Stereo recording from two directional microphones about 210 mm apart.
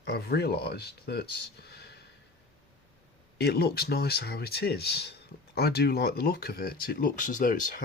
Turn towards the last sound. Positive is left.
turn(degrees=40)  # may be behind; listen again after turning